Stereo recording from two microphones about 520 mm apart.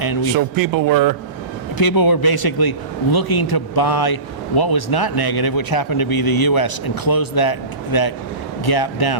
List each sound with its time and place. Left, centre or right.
0.3 s a man's voice: right
1.8 s a man's voice: left